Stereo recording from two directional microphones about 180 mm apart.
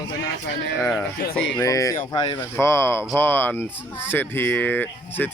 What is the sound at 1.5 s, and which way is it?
Speech, 20° left (ahead or behind).